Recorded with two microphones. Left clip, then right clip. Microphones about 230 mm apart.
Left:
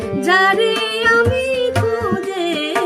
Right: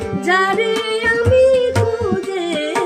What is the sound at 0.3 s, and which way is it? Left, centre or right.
Music, left.